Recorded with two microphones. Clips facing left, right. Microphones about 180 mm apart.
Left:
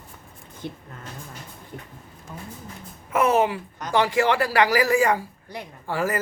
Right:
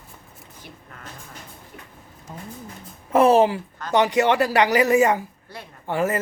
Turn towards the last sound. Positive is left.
turn(degrees=-20)  # may be behind; listen again after turning